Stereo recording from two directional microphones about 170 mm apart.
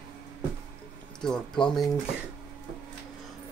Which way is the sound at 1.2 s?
5° left (ahead or behind).